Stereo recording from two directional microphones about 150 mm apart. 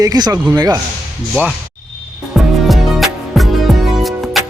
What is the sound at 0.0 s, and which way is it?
Speech, 25° right (ahead or behind).